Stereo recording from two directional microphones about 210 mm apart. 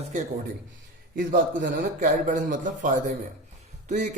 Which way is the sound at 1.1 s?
40° right (ahead or behind).